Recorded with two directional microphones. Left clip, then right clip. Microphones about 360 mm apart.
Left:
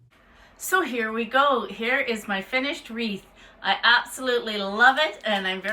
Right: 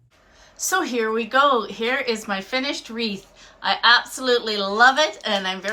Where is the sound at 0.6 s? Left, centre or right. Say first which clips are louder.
Right 2 dB; centre.